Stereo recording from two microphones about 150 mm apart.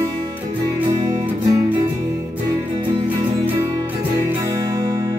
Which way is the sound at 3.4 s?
15° right (ahead or behind).